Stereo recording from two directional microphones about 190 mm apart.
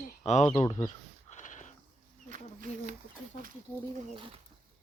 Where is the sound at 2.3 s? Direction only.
45° right (ahead or behind).